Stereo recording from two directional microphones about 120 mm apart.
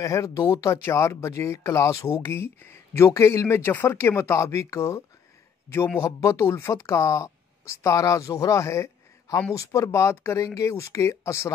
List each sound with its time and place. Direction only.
0.0 s speech: 25° left (ahead or behind)